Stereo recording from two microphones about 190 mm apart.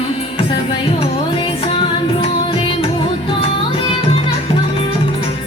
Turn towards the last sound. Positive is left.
turn(degrees=30)  # may be behind; listen again after turning